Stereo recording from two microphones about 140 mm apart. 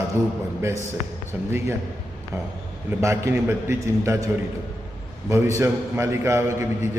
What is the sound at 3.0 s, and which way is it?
A man's voice, 20° right (ahead or behind).